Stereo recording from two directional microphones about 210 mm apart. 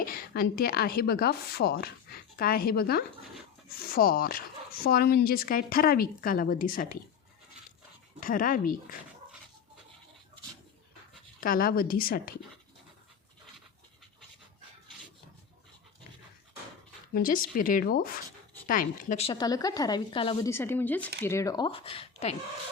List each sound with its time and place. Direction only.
0.0 s speech: 45° left (ahead or behind)
8.2 s speech: 40° left (ahead or behind)
11.3 s speech: 40° left (ahead or behind)
17.2 s a woman's voice: 40° left (ahead or behind); by 20.5 s 20° left (ahead or behind)
20.5 s a woman's voice: 10° left (ahead or behind); by 22.4 s 30° left (ahead or behind)